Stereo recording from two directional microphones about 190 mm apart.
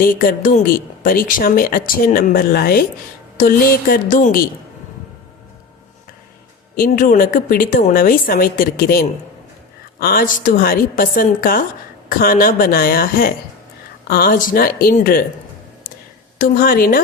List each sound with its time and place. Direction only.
0.0 s speech: 50° left (ahead or behind)
6.7 s speech: 45° left (ahead or behind)
16.4 s speech: 50° left (ahead or behind)